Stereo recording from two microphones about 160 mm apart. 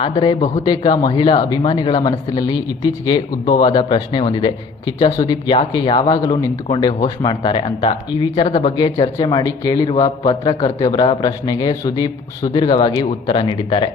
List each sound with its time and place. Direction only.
0.0 s a man's voice: 35° left (ahead or behind)
10.8 s speech: 25° left (ahead or behind)